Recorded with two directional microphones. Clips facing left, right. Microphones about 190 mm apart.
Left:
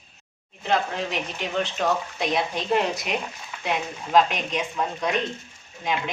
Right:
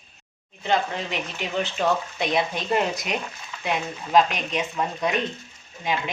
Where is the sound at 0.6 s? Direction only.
Centre (ahead or behind).